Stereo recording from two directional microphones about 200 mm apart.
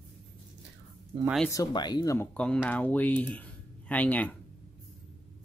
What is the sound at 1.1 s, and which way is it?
Speech, 30° right (ahead or behind).